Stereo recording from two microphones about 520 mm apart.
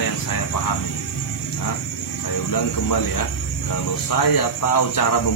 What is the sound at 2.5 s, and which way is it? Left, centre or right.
Speech, left.